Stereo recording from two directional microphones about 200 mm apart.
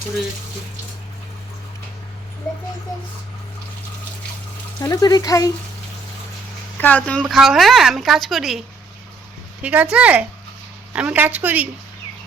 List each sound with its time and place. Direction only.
4.8 s speech: 20° left (ahead or behind)
6.7 s speech: 10° left (ahead or behind); by 11.7 s 5° right (ahead or behind)